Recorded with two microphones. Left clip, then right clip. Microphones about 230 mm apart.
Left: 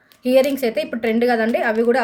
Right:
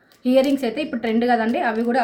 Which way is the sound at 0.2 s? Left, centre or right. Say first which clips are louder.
Left 2 dB; left.